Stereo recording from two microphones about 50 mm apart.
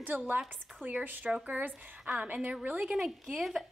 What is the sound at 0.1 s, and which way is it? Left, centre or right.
Speech, right.